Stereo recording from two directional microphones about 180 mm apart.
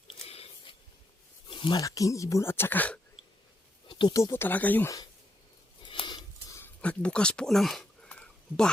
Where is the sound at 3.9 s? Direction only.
25° left (ahead or behind).